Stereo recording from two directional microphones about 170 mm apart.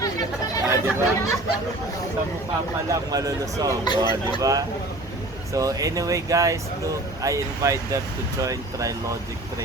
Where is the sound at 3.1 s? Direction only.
20° right (ahead or behind).